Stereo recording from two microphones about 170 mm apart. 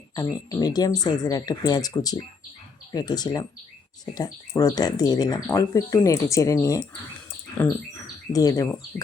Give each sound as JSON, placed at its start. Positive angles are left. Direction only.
{"t": 0.2, "sound": "speech", "side_deg": 20}
{"t": 7.6, "sound": "bird", "side_deg": 10}
{"t": 8.3, "sound": "speech", "side_deg": 20}